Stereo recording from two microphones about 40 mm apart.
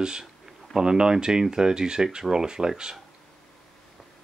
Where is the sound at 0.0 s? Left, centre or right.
Centre.